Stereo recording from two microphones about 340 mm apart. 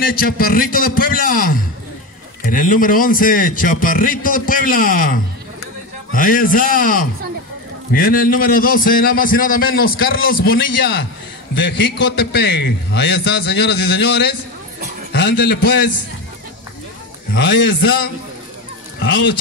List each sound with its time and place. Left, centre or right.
0.0 s a man's voice: left
17.3 s a man's voice: left